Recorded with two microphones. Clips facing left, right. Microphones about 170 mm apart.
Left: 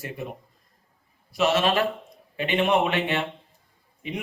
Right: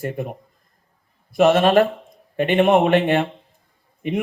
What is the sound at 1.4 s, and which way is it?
A man's voice, 50° right (ahead or behind).